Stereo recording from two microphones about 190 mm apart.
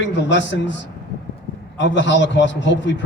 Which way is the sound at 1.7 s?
70° left (ahead or behind).